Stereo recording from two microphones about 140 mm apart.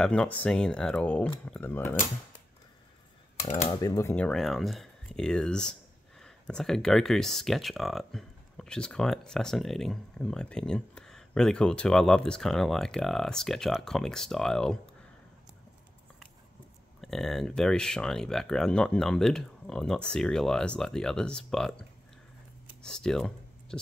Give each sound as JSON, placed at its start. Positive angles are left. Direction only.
{"t": 0.0, "sound": "speech", "side_deg": 5}
{"t": 3.8, "sound": "speech", "side_deg": 25}
{"t": 4.1, "sound": "speech", "side_deg": 5}
{"t": 17.0, "sound": "speech", "side_deg": 0}
{"t": 22.8, "sound": "speech", "side_deg": 5}